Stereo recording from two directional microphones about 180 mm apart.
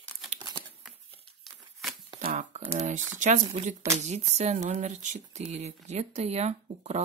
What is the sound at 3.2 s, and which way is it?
Speech, 40° right (ahead or behind).